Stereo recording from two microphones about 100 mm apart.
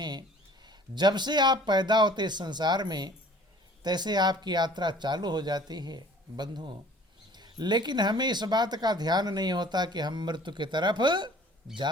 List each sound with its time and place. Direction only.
0.0 s speech: 45° right (ahead or behind)